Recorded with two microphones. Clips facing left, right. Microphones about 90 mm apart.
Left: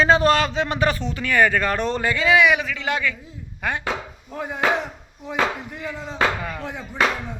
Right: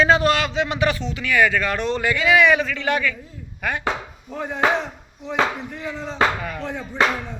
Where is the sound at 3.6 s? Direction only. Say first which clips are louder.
Even; 25° left (ahead or behind).